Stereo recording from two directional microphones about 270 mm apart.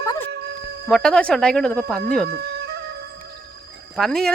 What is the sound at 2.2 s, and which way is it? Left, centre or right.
Music, right.